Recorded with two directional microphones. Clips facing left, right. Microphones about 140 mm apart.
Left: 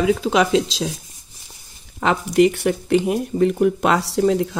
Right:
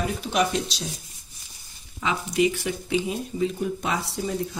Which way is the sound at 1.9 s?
60° left (ahead or behind).